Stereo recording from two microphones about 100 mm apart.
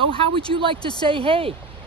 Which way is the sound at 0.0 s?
65° right (ahead or behind).